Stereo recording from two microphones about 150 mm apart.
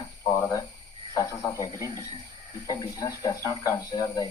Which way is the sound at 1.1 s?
25° left (ahead or behind).